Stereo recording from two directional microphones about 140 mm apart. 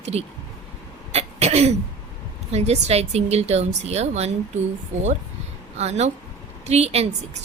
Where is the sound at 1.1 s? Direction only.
50° right (ahead or behind).